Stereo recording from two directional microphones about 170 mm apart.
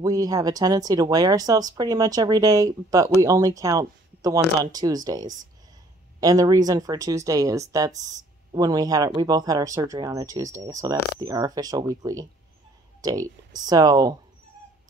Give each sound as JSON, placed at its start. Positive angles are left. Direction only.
{"t": 0.0, "sound": "speech", "side_deg": -20}